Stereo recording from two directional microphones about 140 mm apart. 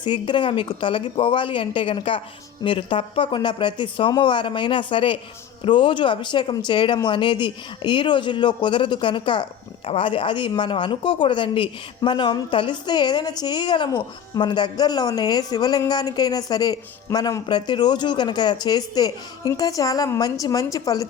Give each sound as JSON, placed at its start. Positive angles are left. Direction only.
{"t": 0.0, "sound": "a woman's voice", "side_deg": 35}